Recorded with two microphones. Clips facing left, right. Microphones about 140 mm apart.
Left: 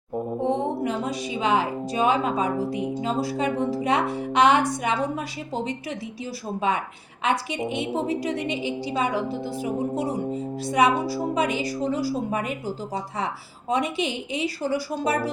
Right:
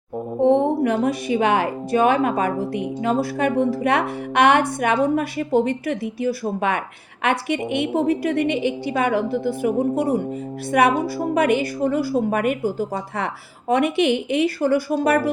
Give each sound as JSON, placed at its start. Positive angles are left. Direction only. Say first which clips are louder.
{"t": 0.4, "sound": "a woman's voice", "louder": "right 9 dB", "side_deg": -55}